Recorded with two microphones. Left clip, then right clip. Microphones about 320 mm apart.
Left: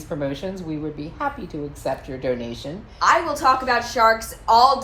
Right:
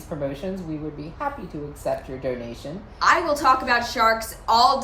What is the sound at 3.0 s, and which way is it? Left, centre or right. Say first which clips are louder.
A woman's voice: left 1 dB; centre.